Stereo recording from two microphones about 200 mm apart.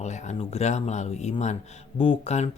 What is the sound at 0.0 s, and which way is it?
Speech, 35° left (ahead or behind).